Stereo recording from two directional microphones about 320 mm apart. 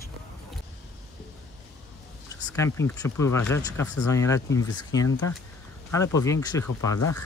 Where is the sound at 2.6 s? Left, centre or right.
Centre.